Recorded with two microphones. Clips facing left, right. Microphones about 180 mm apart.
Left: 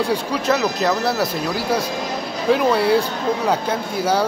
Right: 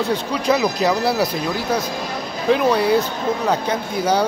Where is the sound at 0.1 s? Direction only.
5° left (ahead or behind).